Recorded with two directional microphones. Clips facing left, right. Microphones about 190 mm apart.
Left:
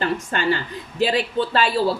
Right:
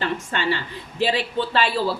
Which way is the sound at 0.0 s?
45° left (ahead or behind).